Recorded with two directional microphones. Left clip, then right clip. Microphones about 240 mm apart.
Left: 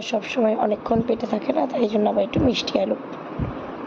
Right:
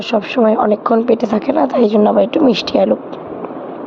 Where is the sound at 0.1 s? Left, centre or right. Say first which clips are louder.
Right 8 dB; centre.